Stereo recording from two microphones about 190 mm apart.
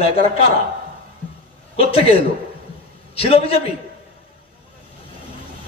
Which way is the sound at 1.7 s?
30° left (ahead or behind).